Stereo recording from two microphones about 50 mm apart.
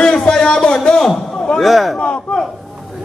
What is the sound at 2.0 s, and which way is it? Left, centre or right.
Speech, centre.